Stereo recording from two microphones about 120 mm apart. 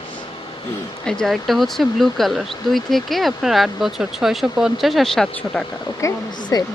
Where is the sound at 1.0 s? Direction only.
5° left (ahead or behind).